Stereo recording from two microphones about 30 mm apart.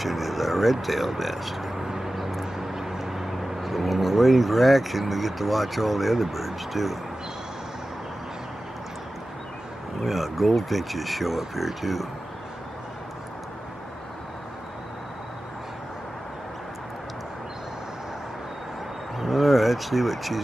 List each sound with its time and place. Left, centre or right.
0.0 s speech: centre
1.9 s a sound: centre
2.1 s vehicle: centre
4.2 s speech: centre
10.0 s speech: centre
19.1 s wild animals: centre